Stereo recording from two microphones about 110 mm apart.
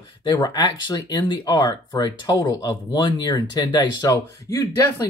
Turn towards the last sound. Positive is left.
turn(degrees=35)  # may be behind; listen again after turning